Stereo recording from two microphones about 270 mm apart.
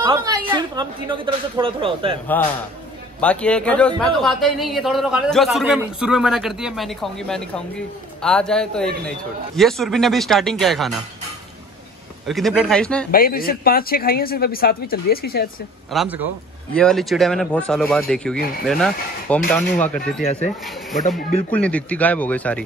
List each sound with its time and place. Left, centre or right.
0.0 s speech: centre
3.2 s speech: centre
12.3 s speech: centre
13.1 s speech: left
15.9 s speech: centre
21.5 s speech: centre